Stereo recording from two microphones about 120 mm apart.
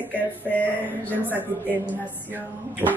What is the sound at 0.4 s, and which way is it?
A man's voice, 15° left (ahead or behind).